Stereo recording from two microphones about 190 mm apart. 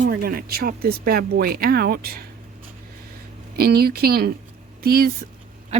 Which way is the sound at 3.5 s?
55° right (ahead or behind).